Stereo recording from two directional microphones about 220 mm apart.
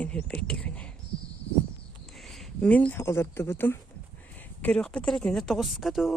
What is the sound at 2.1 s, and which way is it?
Speech, centre (ahead or behind).